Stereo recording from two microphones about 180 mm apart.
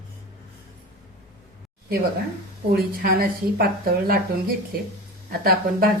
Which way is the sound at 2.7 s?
55° right (ahead or behind).